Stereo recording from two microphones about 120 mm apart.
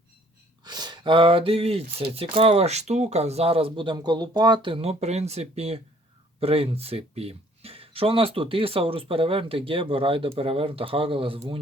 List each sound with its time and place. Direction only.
0.6 s speech: 35° right (ahead or behind)
3.9 s speech: 35° right (ahead or behind)